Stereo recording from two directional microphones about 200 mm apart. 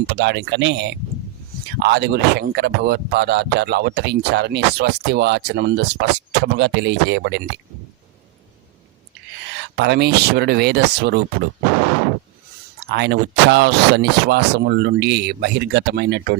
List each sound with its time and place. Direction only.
0.1 s speech: 55° right (ahead or behind)
9.7 s speech: 55° right (ahead or behind)
12.9 s speech: 60° right (ahead or behind)